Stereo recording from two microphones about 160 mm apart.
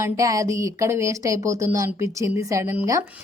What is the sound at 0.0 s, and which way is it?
A woman's voice, 20° right (ahead or behind).